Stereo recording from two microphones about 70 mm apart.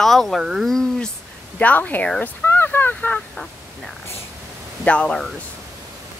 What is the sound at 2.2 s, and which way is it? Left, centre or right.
Fowl, left.